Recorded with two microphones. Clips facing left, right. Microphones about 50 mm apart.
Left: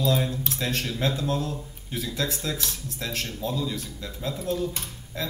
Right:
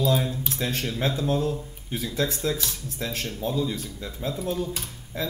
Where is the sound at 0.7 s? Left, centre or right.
Right.